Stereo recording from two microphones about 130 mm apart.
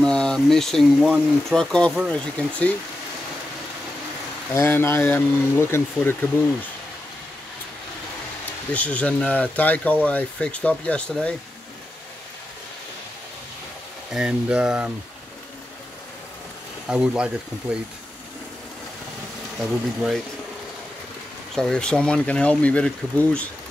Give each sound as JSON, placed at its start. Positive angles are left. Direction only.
{"t": 0.0, "sound": "speech", "side_deg": 5}
{"t": 4.6, "sound": "speech", "side_deg": 15}
{"t": 8.7, "sound": "speech", "side_deg": 10}
{"t": 14.1, "sound": "speech", "side_deg": -5}
{"t": 16.8, "sound": "speech", "side_deg": -5}
{"t": 19.6, "sound": "speech", "side_deg": 0}
{"t": 21.5, "sound": "speech", "side_deg": 5}